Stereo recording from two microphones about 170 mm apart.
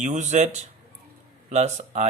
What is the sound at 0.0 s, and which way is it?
Speech, 45° right (ahead or behind).